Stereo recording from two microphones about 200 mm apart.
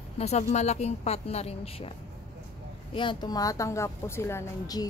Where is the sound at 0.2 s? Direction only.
35° left (ahead or behind).